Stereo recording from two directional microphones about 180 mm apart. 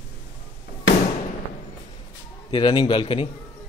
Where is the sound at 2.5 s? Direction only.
25° left (ahead or behind).